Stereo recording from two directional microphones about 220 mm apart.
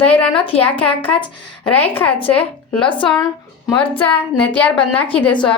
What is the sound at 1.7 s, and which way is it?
A woman's voice, 10° left (ahead or behind).